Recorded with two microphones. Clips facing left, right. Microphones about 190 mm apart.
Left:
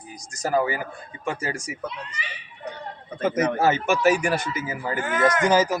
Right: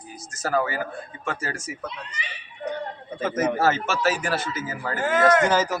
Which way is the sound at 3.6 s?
15° left (ahead or behind).